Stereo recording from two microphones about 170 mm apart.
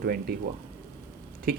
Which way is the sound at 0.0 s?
60° right (ahead or behind).